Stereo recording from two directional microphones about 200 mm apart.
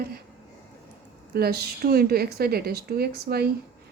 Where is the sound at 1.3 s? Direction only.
50° right (ahead or behind).